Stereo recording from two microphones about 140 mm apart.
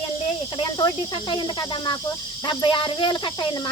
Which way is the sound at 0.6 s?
30° left (ahead or behind).